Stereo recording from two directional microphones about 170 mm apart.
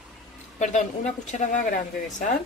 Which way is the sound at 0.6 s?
45° left (ahead or behind).